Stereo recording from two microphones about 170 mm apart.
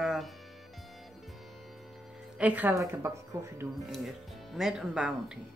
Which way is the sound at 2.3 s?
10° right (ahead or behind).